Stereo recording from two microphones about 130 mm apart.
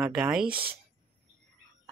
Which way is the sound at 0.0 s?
5° right (ahead or behind).